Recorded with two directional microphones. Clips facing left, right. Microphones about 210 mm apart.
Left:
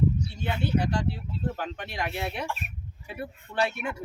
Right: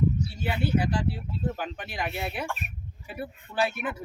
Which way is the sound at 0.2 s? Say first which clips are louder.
Right 1 dB; 5° right (ahead or behind).